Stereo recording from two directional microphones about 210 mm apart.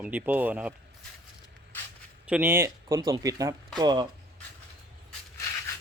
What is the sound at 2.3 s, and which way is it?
Speech, 10° right (ahead or behind).